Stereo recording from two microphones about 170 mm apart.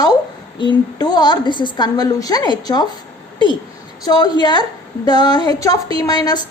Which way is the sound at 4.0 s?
25° left (ahead or behind).